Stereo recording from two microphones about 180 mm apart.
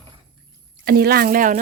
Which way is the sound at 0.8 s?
60° right (ahead or behind).